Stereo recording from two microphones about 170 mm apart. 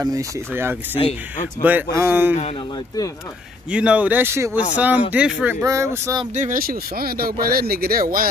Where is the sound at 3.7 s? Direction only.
5° right (ahead or behind).